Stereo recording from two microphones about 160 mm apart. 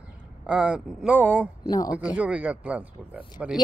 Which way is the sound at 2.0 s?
5° right (ahead or behind).